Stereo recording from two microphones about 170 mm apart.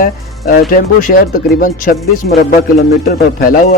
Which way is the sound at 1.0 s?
60° left (ahead or behind).